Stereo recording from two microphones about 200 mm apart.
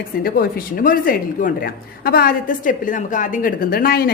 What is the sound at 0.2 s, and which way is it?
A woman's voice, 50° left (ahead or behind).